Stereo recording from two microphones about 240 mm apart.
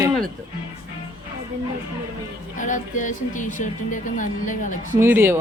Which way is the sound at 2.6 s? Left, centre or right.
Left.